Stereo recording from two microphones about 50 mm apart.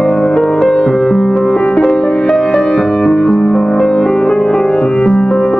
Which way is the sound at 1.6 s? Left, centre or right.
Left.